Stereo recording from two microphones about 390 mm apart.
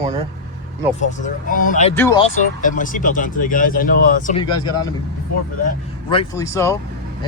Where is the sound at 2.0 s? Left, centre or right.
Centre.